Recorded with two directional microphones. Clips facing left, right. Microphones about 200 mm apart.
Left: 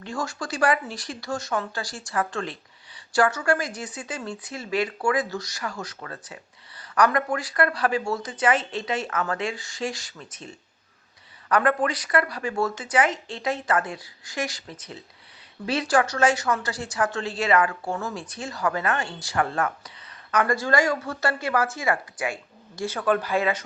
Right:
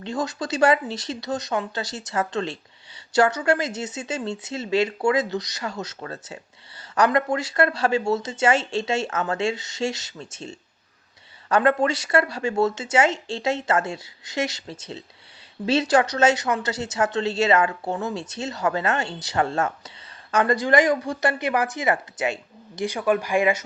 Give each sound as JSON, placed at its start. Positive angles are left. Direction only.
{"t": 0.0, "sound": "speech", "side_deg": -20}